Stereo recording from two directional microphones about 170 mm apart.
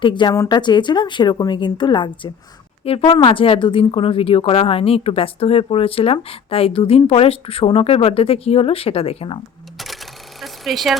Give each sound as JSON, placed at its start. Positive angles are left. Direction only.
{"t": 0.0, "sound": "a woman's voice", "side_deg": 30}
{"t": 9.7, "sound": "cash register", "side_deg": 0}
{"t": 10.4, "sound": "a sound", "side_deg": 0}